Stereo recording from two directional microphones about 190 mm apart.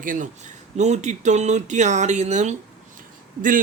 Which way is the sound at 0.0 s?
45° right (ahead or behind).